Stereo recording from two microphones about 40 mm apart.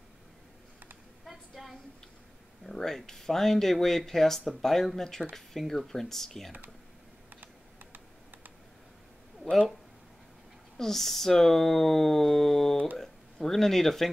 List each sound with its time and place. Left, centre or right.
1.5 s a sound: centre
2.6 s speech: centre
7.3 s computer keyboard: right
10.8 s speech: centre